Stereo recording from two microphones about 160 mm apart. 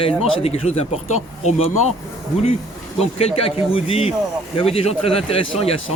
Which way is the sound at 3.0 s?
40° left (ahead or behind).